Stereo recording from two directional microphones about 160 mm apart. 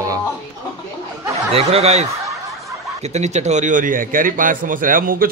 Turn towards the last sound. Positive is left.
turn(degrees=-60)  # may be behind; listen again after turning